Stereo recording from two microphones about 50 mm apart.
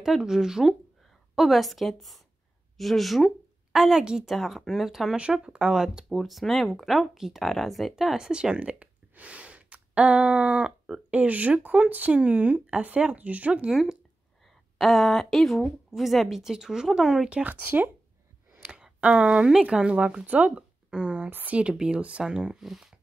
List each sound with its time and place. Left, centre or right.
0.0 s a woman's voice: centre
3.7 s speech: centre
4.3 s a woman's voice: centre
5.1 s speech: centre
6.0 s a woman's voice: centre
8.0 s speech: centre
11.1 s speech: right
13.7 s a woman's voice: centre
17.3 s speech: right
17.6 s speech: right
18.6 s speech: centre
21.3 s speech: right
21.7 s speech: centre